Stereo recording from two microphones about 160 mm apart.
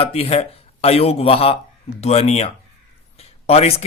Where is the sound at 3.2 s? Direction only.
40° left (ahead or behind).